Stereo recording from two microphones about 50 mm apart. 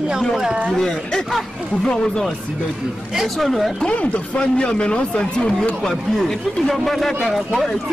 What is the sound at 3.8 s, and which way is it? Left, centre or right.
Speech, left.